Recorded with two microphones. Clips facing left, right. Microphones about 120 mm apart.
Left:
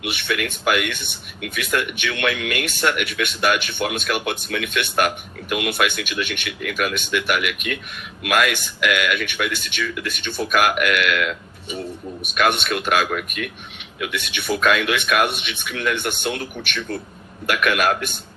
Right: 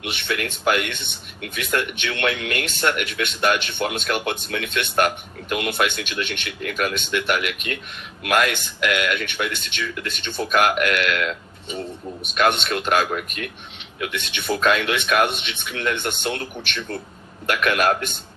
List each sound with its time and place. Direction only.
0.1 s speech: 30° right (ahead or behind)